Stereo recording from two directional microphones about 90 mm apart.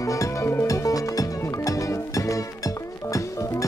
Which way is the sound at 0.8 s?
40° left (ahead or behind).